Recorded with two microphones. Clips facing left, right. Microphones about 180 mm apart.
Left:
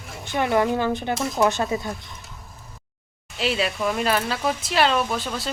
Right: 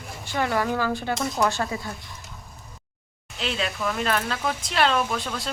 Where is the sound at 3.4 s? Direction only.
5° left (ahead or behind).